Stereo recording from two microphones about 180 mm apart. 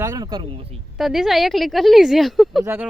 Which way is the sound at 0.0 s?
20° right (ahead or behind).